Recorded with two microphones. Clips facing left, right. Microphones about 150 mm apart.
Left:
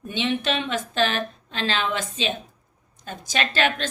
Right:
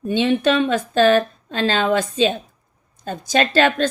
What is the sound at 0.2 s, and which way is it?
A woman's voice, 45° right (ahead or behind).